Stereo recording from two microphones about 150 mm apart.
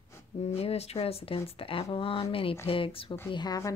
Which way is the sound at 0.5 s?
40° left (ahead or behind).